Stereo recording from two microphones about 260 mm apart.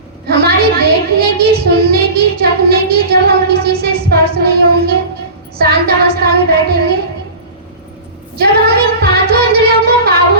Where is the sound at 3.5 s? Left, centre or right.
Right.